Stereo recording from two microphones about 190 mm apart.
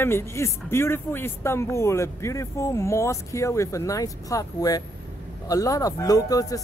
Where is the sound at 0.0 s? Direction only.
15° left (ahead or behind).